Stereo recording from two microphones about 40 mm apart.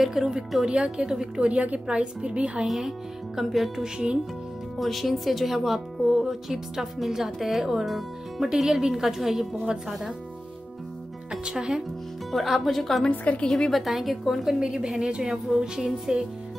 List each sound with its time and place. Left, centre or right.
0.0 s a woman's voice: centre
0.7 s a woman's voice: right
1.5 s a woman's voice: right
2.6 s a woman's voice: centre
3.8 s a woman's voice: right
4.7 s a woman's voice: centre
11.5 s a woman's voice: centre
12.3 s speech: centre
13.1 s a woman's voice: left
13.7 s speech: centre
14.6 s a woman's voice: centre
15.2 s a woman's voice: centre